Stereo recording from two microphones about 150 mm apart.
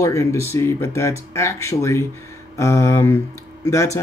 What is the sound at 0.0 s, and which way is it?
Speech, 20° left (ahead or behind).